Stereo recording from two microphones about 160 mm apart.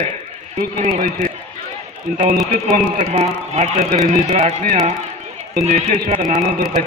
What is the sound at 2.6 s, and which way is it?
A man's voice, 50° right (ahead or behind).